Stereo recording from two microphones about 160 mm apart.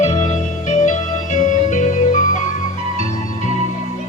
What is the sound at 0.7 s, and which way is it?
Organ, 50° left (ahead or behind).